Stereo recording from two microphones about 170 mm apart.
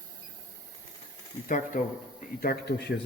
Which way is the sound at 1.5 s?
50° left (ahead or behind).